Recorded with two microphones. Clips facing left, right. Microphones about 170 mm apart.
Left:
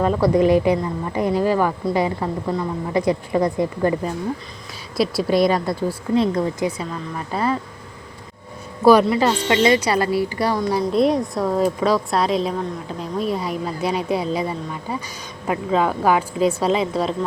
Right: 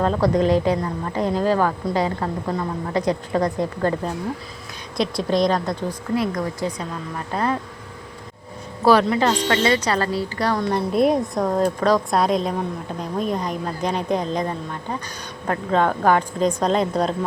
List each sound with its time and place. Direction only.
0.0 s a woman's voice: 10° left (ahead or behind)
6.1 s speech: 25° left (ahead or behind)
6.7 s speech: 5° left (ahead or behind)
8.8 s a woman's voice: 15° left (ahead or behind)